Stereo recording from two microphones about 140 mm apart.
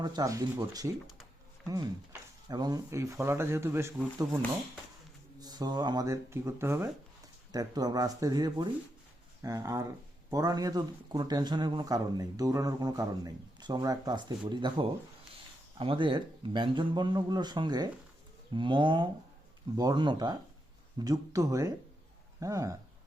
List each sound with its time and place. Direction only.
0.0 s speech: 30° right (ahead or behind)
2.5 s speech: 30° right (ahead or behind)
5.4 s speech: 30° right (ahead or behind)